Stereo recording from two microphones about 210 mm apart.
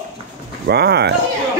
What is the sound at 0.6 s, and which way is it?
Speech, 50° right (ahead or behind).